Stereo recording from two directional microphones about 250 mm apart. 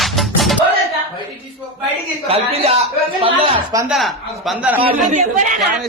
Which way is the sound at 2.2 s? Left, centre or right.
Right.